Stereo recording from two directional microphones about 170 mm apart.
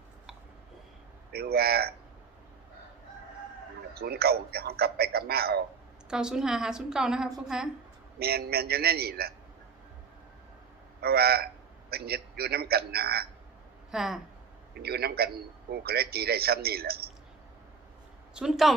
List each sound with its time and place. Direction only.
1.3 s a man's voice: 65° right (ahead or behind)
3.9 s a man's voice: 65° right (ahead or behind)
6.1 s a woman's voice: 5° right (ahead or behind)
8.2 s a man's voice: 65° right (ahead or behind)
11.0 s a man's voice: 65° right (ahead or behind)
13.9 s a woman's voice: centre (ahead or behind)
14.8 s a man's voice: 65° right (ahead or behind)
18.3 s a woman's voice: centre (ahead or behind)